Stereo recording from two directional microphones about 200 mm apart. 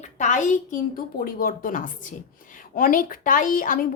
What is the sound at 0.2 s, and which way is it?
A child's voice, 40° left (ahead or behind).